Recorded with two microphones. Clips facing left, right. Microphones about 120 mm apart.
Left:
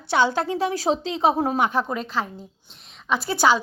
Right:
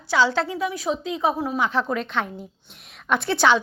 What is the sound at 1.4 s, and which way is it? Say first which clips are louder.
Speech: left 3 dB; 45° left (ahead or behind).